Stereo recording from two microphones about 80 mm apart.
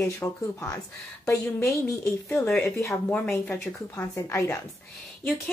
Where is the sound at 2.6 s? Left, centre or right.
Left.